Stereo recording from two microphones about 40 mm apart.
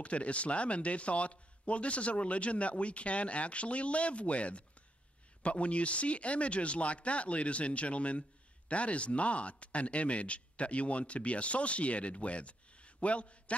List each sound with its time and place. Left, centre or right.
0.0 s speech: left